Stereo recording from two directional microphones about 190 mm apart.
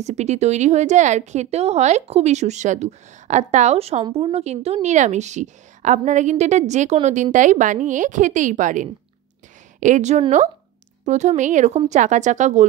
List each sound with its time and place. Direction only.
0.0 s speech: 35° right (ahead or behind)